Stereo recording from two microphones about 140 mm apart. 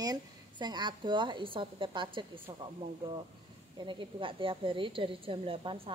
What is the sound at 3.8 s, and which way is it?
Speech, 35° right (ahead or behind).